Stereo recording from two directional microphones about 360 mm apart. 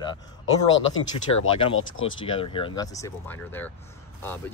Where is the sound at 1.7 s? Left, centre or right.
Left.